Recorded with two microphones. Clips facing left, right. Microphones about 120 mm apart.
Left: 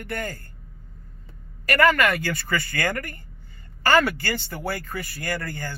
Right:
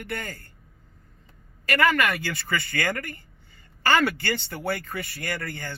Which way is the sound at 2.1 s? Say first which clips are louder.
Left 3 dB; 50° left (ahead or behind).